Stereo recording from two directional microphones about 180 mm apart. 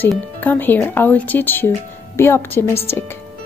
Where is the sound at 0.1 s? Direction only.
10° left (ahead or behind).